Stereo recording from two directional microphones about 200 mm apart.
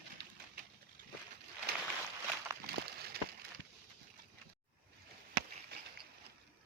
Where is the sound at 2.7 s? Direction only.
50° right (ahead or behind).